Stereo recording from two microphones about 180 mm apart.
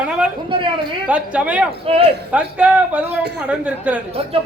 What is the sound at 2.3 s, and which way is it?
Speech, 10° right (ahead or behind).